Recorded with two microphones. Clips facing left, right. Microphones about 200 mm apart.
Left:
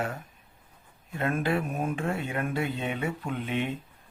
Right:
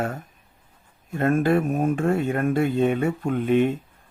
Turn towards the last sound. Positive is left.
turn(degrees=-45)  # may be behind; listen again after turning